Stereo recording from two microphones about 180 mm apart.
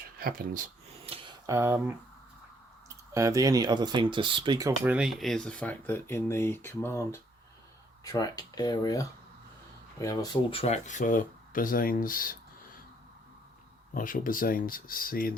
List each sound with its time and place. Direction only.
0.2 s speech: 55° right (ahead or behind)
1.0 s a sound: 30° right (ahead or behind)
1.5 s speech: 15° right (ahead or behind)
3.1 s speech: 15° right (ahead or behind)
4.9 s speech: 5° right (ahead or behind); by 10.3 s 20° left (ahead or behind)
10.5 s speech: 35° left (ahead or behind); by 12.4 s 50° left (ahead or behind)
13.9 s speech: 50° left (ahead or behind)